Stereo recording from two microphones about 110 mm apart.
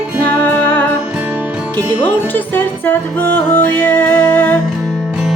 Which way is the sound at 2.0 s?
15° left (ahead or behind).